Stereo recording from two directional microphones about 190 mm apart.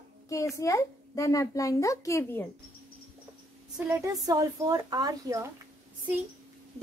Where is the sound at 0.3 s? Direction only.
15° left (ahead or behind).